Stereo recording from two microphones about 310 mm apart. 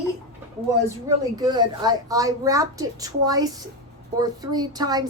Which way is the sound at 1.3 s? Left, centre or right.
Centre.